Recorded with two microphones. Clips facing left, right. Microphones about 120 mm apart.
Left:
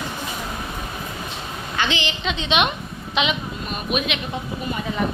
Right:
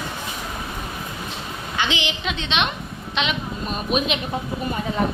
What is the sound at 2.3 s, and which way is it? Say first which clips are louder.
A woman's voice: left 5 dB; 5° left (ahead or behind).